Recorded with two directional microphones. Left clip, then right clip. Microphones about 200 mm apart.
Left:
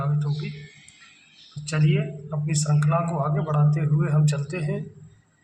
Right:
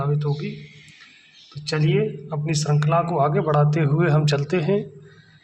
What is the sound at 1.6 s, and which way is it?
A man's voice, 40° right (ahead or behind).